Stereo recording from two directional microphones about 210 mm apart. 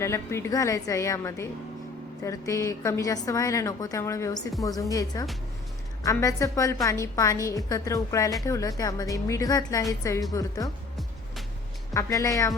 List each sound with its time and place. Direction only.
0.0 s a woman's voice: 15° left (ahead or behind)
11.9 s a woman's voice: 15° left (ahead or behind)